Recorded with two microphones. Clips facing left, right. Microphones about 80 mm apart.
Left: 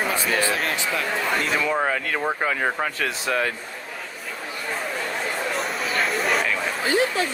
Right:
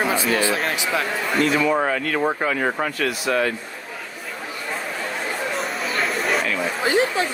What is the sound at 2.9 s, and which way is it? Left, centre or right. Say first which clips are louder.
Speech: right 3 dB; left.